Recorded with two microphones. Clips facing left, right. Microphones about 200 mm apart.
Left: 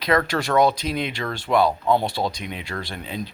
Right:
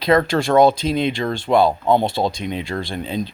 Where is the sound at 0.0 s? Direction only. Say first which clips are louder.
Right 5 dB; 25° right (ahead or behind).